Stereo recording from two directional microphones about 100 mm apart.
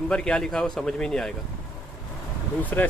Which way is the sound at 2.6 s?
15° left (ahead or behind).